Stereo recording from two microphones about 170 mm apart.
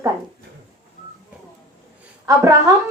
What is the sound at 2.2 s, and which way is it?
Speech, 20° right (ahead or behind).